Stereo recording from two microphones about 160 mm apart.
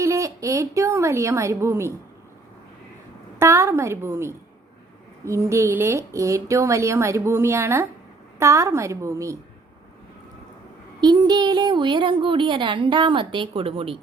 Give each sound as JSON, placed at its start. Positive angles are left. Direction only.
{"t": 0.0, "sound": "speech", "side_deg": -20}
{"t": 3.3, "sound": "a woman's voice", "side_deg": -15}
{"t": 11.0, "sound": "a woman's voice", "side_deg": -25}